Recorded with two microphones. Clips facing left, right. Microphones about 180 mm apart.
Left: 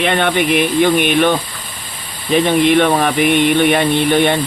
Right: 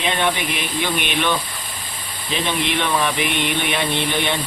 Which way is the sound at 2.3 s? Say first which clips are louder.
Left 11 dB; 50° left (ahead or behind).